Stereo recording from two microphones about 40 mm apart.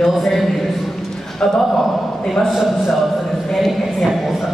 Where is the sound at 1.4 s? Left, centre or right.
Left.